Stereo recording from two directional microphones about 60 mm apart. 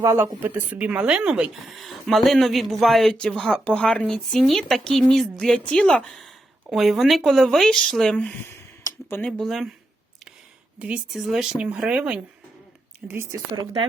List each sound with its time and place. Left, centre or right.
0.0 s a woman's voice: right; by 1.5 s centre
1.7 s a woman's voice: centre
9.4 s speech: centre
10.8 s speech: centre
11.1 s a woman's voice: centre; by 13.2 s right